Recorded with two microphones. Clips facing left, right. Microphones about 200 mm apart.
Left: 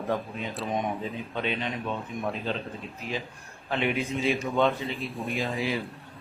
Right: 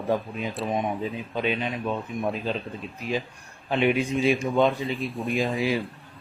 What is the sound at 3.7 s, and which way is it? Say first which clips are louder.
Speech: right 5 dB; 15° right (ahead or behind).